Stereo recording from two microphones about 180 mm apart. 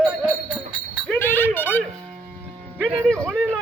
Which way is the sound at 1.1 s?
10° left (ahead or behind).